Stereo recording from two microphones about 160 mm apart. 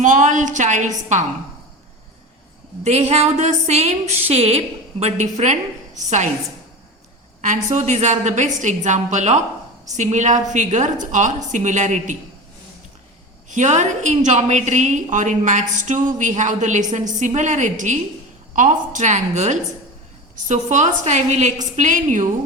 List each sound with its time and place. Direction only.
0.0 s a woman's voice: 50° right (ahead or behind)
2.8 s a woman's voice: 40° right (ahead or behind)
7.4 s a woman's voice: 50° right (ahead or behind)
13.5 s a woman's voice: 50° right (ahead or behind)